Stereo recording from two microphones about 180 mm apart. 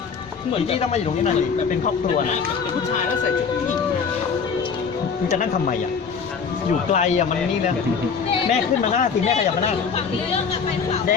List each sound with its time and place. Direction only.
0.7 s speech: 35° left (ahead or behind)
6.9 s speech: 40° left (ahead or behind)
8.8 s speech: 40° left (ahead or behind)